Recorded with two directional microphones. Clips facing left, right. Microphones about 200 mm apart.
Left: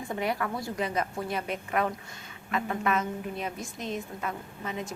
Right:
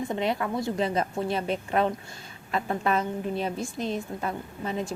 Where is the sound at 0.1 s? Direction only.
25° right (ahead or behind).